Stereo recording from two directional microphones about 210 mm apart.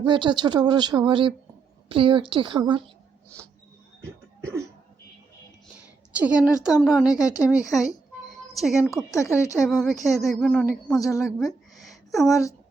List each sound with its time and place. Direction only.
0.0 s speech: 20° right (ahead or behind)
3.2 s rodents: 5° left (ahead or behind)
6.1 s speech: 5° right (ahead or behind)
7.2 s speech: 15° left (ahead or behind)
8.5 s speech: centre (ahead or behind)
9.0 s speech: 15° left (ahead or behind)
9.6 s speech: centre (ahead or behind)
11.2 s a sound: centre (ahead or behind)